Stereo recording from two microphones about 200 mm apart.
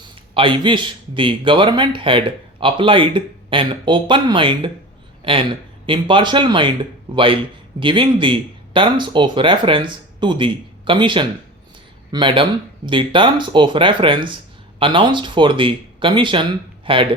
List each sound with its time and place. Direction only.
0.3 s a man's voice: 25° right (ahead or behind)